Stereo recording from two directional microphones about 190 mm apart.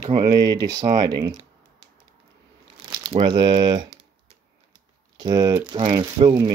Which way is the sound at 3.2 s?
25° right (ahead or behind).